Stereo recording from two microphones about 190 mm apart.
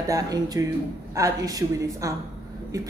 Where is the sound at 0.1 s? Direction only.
20° right (ahead or behind).